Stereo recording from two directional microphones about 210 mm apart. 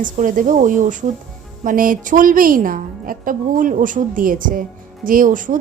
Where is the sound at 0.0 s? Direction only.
40° right (ahead or behind).